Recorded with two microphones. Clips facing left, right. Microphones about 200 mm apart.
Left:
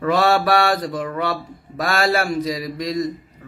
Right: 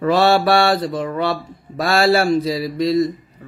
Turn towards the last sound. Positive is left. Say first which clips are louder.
# right 6 dB
turn(degrees=-30)  # may be behind; listen again after turning